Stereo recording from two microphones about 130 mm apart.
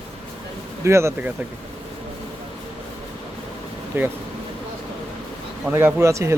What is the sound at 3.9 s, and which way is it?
Speech, 15° right (ahead or behind).